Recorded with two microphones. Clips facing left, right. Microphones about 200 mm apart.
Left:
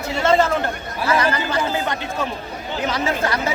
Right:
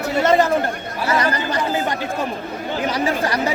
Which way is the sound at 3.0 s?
35° right (ahead or behind).